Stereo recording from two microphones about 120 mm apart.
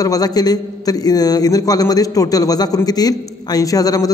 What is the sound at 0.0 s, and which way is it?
A man's voice, 30° left (ahead or behind).